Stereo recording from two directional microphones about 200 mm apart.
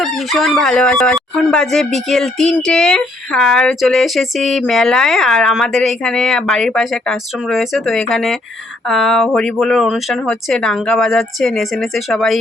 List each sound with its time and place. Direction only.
0.0 s speech: centre (ahead or behind)